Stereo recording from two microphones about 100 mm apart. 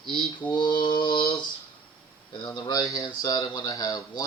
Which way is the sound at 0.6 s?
50° left (ahead or behind).